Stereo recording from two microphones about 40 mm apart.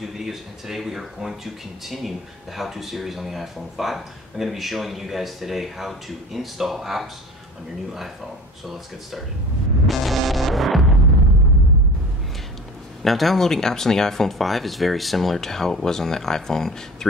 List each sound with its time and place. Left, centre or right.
0.0 s speech: centre
9.8 s music: centre
13.0 s speech: centre